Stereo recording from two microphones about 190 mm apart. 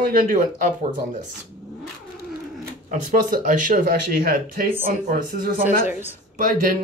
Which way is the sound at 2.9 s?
45° right (ahead or behind).